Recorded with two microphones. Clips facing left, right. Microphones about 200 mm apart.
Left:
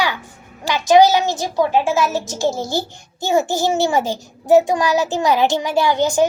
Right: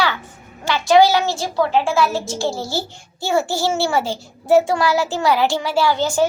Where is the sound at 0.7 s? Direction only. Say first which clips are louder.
Left 1 dB; 15° left (ahead or behind).